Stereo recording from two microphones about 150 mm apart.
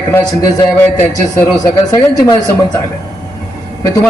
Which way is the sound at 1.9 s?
25° left (ahead or behind).